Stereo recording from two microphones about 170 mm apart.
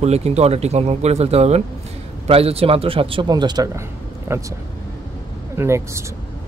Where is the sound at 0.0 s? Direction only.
40° right (ahead or behind); by 4.6 s 20° right (ahead or behind).